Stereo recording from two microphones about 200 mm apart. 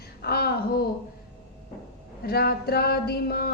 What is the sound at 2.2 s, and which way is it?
Speech, 50° left (ahead or behind).